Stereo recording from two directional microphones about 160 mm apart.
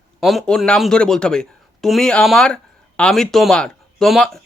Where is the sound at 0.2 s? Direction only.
Centre (ahead or behind).